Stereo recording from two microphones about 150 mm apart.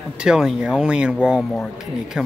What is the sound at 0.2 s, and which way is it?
Speech, 5° right (ahead or behind).